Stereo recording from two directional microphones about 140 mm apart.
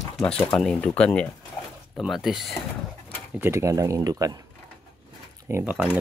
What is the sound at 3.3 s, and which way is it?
Speech, 20° right (ahead or behind).